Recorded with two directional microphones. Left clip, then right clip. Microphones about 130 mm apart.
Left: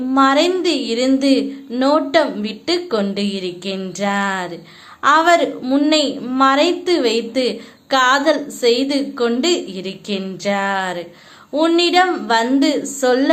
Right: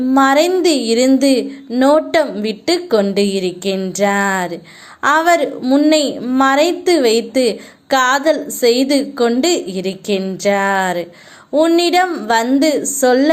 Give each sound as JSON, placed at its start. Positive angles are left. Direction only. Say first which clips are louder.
{"t": 0.1, "sound": "a woman's voice", "louder": "right 2 dB", "side_deg": -40}
{"t": 5.6, "sound": "a woman's voice", "louder": "right 4 dB", "side_deg": -25}
{"t": 5.9, "sound": "a woman's voice", "louder": "right 3 dB", "side_deg": -40}